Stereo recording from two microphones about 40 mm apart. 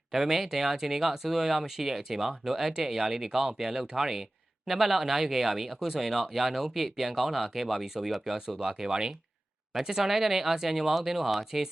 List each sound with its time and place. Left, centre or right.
0.1 s speech: centre
8.4 s speech: centre